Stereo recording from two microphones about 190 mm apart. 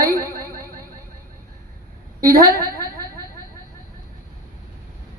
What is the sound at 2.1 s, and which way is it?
Speech, 20° right (ahead or behind).